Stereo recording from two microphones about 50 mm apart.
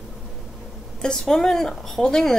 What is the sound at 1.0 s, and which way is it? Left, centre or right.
Speech, centre.